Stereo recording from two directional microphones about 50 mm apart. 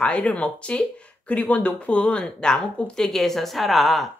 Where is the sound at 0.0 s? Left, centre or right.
Left.